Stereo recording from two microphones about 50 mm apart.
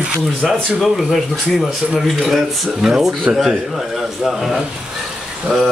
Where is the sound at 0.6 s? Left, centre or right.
Centre.